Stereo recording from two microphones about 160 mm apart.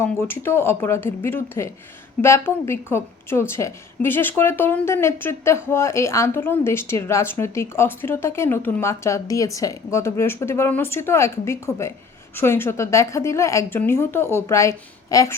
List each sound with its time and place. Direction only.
0.0 s a woman's voice: 15° left (ahead or behind)